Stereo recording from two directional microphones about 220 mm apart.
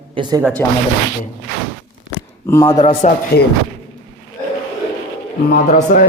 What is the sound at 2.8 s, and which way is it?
Speech, 35° left (ahead or behind).